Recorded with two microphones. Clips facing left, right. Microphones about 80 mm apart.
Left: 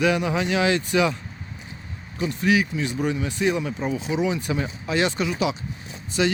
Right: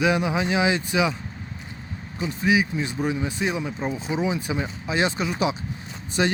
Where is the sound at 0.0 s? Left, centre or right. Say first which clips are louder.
Even; centre.